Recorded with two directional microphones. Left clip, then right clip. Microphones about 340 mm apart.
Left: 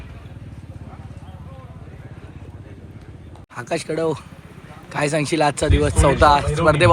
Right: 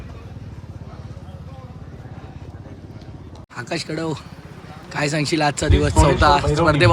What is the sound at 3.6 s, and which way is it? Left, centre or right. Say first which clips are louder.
A man's voice: left 3 dB; centre.